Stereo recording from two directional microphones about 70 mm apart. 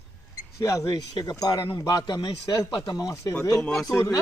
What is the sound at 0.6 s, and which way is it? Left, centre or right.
Speech, left.